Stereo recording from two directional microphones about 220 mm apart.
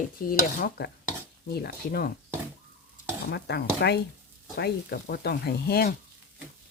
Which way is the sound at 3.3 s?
50° left (ahead or behind).